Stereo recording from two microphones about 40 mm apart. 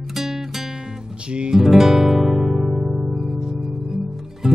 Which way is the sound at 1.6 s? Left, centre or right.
Centre.